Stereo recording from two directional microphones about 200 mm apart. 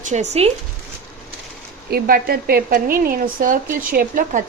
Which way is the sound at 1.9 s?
50° right (ahead or behind).